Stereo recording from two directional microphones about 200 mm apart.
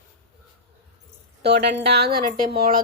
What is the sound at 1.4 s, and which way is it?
Speech, 55° right (ahead or behind).